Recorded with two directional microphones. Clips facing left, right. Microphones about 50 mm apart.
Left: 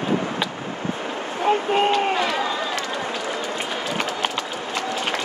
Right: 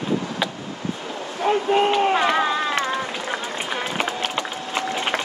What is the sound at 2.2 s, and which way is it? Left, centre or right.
Run, right.